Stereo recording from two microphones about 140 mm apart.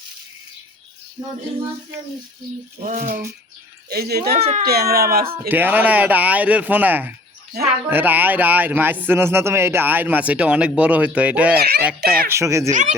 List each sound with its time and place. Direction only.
2.8 s speech: 65° right (ahead or behind); by 4.3 s 90° right
4.4 s speech: 45° right (ahead or behind)
4.6 s speech: 90° right
5.5 s speech: 15° right (ahead or behind)
12.3 s speech: 20° right (ahead or behind)
12.7 s speech: 60° right (ahead or behind)